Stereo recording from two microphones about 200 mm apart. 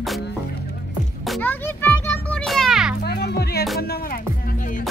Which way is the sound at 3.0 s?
55° left (ahead or behind).